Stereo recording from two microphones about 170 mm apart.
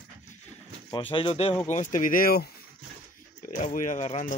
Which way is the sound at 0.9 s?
30° left (ahead or behind).